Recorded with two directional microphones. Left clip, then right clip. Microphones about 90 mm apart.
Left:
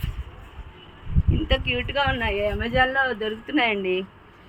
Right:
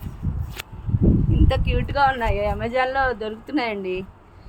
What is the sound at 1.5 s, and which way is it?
Speech, 45° right (ahead or behind).